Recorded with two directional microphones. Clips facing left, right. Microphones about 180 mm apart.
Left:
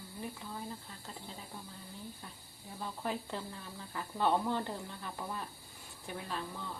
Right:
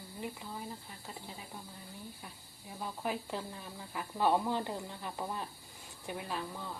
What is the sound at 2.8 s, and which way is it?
Speech, 10° right (ahead or behind).